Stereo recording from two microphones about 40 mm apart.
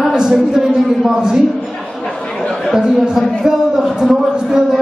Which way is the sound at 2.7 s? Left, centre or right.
Centre.